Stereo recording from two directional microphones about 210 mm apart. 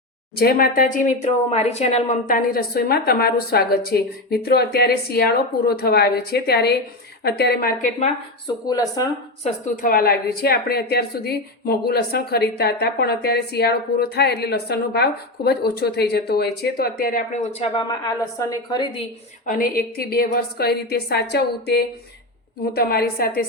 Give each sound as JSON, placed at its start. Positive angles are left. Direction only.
{"t": 0.3, "sound": "a woman's voice", "side_deg": 45}
{"t": 8.6, "sound": "a woman's voice", "side_deg": 15}
{"t": 9.4, "sound": "a woman's voice", "side_deg": 40}
{"t": 18.3, "sound": "a woman's voice", "side_deg": 15}
{"t": 19.5, "sound": "a woman's voice", "side_deg": 40}